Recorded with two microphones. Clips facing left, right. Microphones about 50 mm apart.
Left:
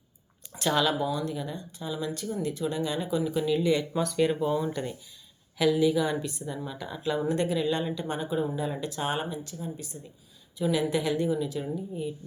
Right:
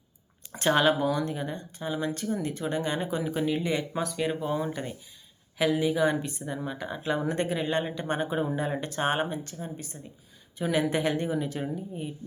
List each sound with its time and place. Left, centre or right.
0.5 s speech: right
5.5 s speech: right